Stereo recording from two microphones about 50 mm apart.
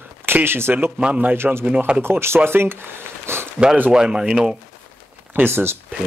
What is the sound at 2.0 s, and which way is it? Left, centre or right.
Speech, right.